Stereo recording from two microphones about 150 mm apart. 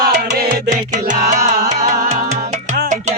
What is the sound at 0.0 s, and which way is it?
Music, 75° right (ahead or behind).